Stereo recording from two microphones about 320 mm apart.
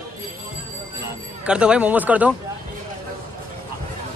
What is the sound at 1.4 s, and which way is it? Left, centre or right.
Speech, centre.